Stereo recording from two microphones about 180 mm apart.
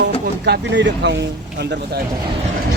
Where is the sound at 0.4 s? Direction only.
75° right (ahead or behind).